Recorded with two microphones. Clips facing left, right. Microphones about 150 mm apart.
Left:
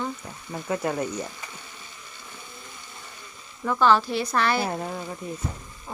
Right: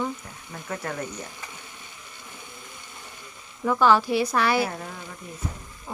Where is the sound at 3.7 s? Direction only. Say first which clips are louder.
Right 1 dB; 10° right (ahead or behind).